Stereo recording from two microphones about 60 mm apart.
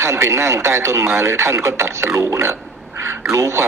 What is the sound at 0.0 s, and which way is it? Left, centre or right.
Speech, right.